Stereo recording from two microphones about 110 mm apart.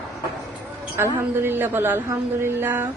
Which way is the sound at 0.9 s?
20° right (ahead or behind).